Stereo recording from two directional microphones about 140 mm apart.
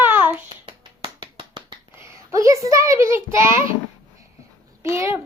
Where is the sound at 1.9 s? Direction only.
20° right (ahead or behind).